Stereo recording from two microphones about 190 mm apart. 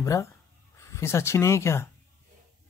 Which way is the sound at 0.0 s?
15° left (ahead or behind).